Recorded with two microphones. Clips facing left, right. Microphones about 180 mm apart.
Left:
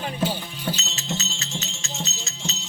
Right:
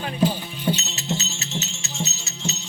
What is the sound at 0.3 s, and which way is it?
Music, 5° right (ahead or behind).